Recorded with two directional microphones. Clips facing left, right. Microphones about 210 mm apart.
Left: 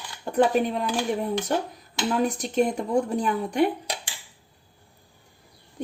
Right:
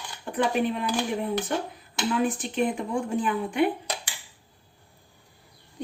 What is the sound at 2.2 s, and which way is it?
Speech, 40° left (ahead or behind).